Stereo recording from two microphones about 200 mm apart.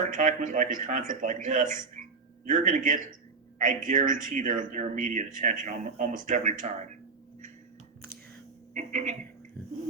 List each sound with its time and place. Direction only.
0.0 s speech: 40° right (ahead or behind)
8.7 s speech: 35° right (ahead or behind)